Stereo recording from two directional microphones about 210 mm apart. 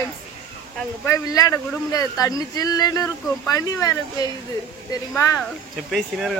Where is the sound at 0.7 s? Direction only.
15° left (ahead or behind).